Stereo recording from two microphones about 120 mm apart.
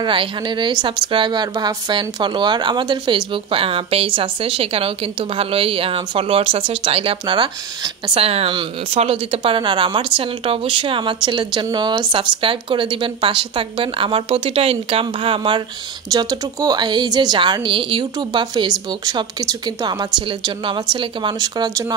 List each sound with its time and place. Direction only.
0.0 s a woman's voice: 45° right (ahead or behind)
8.2 s a woman's voice: 55° right (ahead or behind)
16.1 s speech: 30° right (ahead or behind)